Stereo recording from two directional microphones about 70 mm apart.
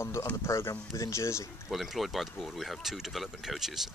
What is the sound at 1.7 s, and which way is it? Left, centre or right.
Speech, centre.